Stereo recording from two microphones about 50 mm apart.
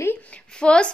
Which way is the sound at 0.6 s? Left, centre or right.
Centre.